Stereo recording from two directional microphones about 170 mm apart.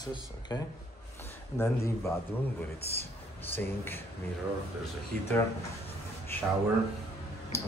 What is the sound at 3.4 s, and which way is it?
Speech, 10° left (ahead or behind).